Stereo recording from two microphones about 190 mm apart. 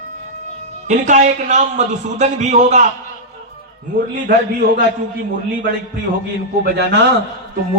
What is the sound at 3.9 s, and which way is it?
Speech, 50° right (ahead or behind).